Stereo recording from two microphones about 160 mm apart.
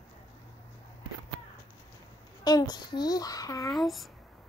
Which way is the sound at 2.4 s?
25° left (ahead or behind).